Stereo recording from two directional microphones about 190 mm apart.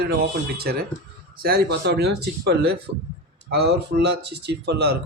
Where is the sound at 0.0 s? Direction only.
55° right (ahead or behind).